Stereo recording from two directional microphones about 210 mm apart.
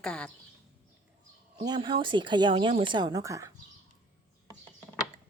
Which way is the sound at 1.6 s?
20° right (ahead or behind).